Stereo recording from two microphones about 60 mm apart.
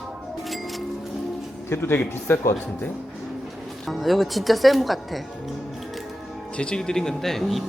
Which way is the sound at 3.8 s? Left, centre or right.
Centre.